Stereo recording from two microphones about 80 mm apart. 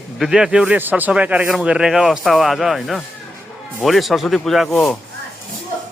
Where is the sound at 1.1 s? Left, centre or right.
Centre.